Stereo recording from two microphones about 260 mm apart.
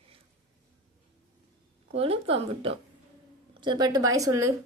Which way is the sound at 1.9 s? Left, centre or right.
Right.